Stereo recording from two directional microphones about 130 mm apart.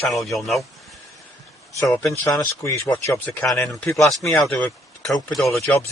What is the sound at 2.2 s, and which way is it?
Speech, 30° left (ahead or behind).